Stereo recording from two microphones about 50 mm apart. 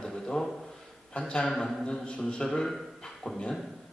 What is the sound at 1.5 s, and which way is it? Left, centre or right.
Speech, centre.